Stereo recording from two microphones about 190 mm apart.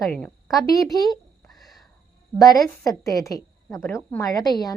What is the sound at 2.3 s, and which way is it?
A woman's voice, 20° left (ahead or behind).